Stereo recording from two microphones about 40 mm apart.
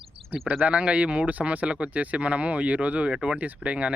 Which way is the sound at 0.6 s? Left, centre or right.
Right.